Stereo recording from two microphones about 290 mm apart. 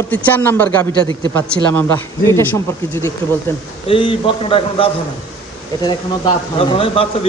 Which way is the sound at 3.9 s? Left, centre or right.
Centre.